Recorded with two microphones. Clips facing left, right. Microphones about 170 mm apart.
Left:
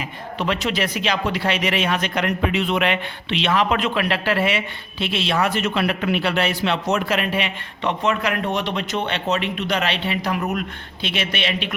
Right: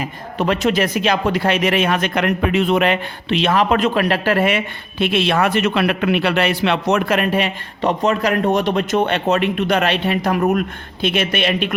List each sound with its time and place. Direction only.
0.0 s speech: 45° right (ahead or behind)